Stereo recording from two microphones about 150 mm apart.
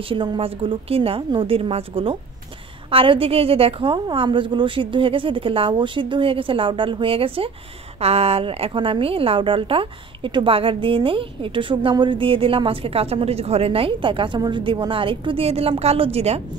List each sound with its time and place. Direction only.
0.1 s a woman's voice: 35° right (ahead or behind)